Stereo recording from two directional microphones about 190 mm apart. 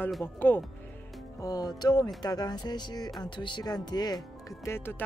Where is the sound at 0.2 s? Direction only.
10° left (ahead or behind).